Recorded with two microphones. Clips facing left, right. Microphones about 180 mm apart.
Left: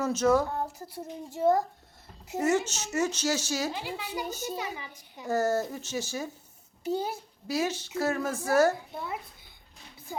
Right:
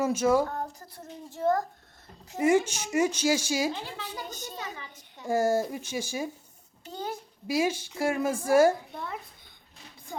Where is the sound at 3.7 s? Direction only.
10° left (ahead or behind).